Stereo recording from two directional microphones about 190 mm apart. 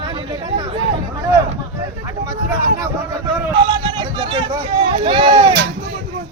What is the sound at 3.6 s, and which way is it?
Hubbub, 25° right (ahead or behind).